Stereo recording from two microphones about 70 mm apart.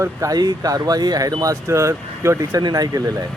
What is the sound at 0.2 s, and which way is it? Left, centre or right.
Speech, right.